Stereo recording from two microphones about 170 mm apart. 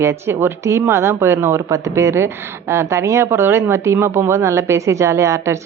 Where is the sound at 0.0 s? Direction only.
15° right (ahead or behind).